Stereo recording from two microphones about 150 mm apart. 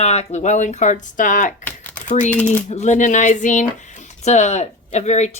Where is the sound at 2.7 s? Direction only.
55° left (ahead or behind).